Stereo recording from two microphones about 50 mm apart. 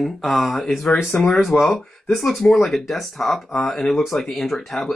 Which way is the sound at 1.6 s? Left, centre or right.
Centre.